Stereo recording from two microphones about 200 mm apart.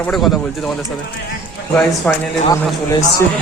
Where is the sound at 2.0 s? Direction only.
5° left (ahead or behind).